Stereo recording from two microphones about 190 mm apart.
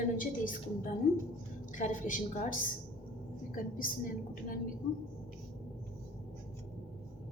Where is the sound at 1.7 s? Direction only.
40° left (ahead or behind).